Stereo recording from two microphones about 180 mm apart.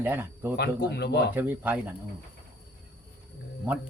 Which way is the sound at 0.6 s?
65° left (ahead or behind).